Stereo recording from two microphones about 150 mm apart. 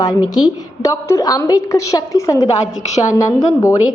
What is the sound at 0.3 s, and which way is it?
A woman's voice, 25° left (ahead or behind).